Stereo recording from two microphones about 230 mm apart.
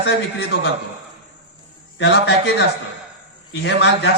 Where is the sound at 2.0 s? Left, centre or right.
Left.